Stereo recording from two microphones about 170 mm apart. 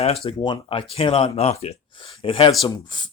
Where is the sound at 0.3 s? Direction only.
30° left (ahead or behind).